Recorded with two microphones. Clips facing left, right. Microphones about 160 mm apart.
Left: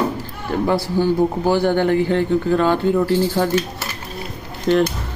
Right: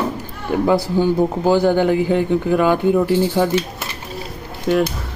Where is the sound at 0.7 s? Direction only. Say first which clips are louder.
Right 2 dB; 15° right (ahead or behind).